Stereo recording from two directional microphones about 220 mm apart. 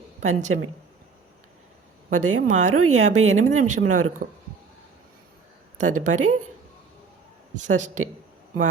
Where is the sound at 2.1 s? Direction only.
35° right (ahead or behind).